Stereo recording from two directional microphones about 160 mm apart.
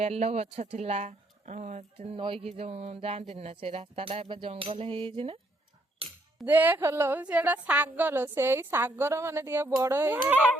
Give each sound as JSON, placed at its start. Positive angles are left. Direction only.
{"t": 0.0, "sound": "speech", "side_deg": -40}
{"t": 6.0, "sound": "chink", "side_deg": -35}
{"t": 6.4, "sound": "a woman's voice", "side_deg": -10}